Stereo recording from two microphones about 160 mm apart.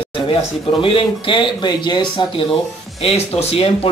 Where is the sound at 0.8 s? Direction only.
35° left (ahead or behind).